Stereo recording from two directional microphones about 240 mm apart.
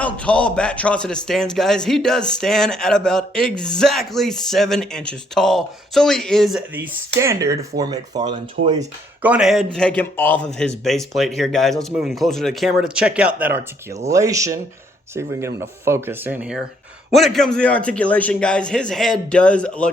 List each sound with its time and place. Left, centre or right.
0.0 s a man's voice: centre
7.2 s speech: centre
8.6 s speech: right
9.2 s a man's voice: centre